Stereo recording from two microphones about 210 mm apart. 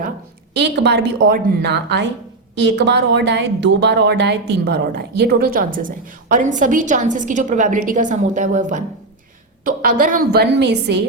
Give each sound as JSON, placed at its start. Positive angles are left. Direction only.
{"t": 0.5, "sound": "a woman's voice", "side_deg": -55}